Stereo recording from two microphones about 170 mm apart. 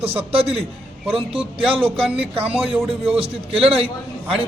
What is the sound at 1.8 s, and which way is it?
A man's voice, 5° right (ahead or behind).